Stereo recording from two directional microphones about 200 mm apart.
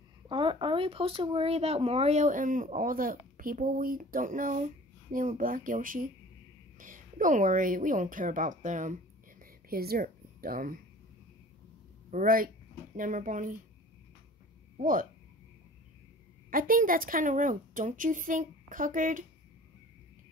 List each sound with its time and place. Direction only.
0.3 s speech: 25° right (ahead or behind)
9.4 s a sound: 50° right (ahead or behind)
12.1 s speech: 45° right (ahead or behind)
14.8 s speech: 45° right (ahead or behind)
16.4 s speech: 45° right (ahead or behind)